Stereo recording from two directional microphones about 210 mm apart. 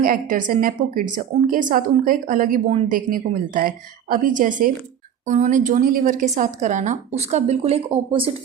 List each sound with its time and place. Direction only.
0.0 s a woman's voice: 40° right (ahead or behind); by 8.3 s 25° right (ahead or behind)